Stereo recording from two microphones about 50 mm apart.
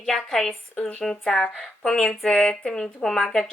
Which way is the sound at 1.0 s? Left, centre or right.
Centre.